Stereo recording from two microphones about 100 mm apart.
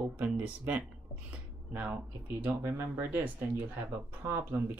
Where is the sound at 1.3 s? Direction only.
15° right (ahead or behind).